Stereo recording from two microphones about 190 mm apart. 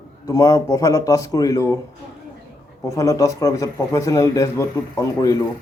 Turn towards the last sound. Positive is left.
turn(degrees=15)  # may be behind; listen again after turning